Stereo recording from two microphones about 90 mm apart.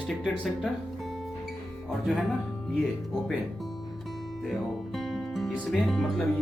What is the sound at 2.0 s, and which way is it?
Speech, centre (ahead or behind).